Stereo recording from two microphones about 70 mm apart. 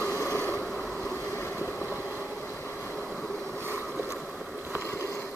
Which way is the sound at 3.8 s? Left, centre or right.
Left.